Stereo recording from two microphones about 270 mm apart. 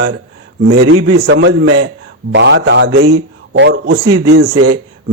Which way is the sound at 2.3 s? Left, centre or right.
Right.